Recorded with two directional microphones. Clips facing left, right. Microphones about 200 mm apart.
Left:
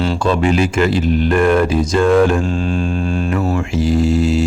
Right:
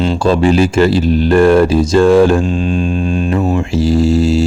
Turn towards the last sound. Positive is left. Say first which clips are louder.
# right 3 dB
turn(degrees=-30)  # may be behind; listen again after turning